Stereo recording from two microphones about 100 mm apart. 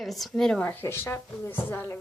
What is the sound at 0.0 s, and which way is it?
Speech, centre (ahead or behind).